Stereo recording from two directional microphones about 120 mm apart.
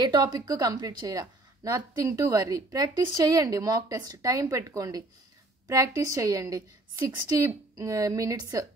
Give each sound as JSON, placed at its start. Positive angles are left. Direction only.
{"t": 0.0, "sound": "speech", "side_deg": -35}